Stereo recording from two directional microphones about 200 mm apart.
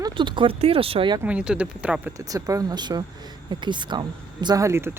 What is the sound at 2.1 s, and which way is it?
Speech, 15° right (ahead or behind).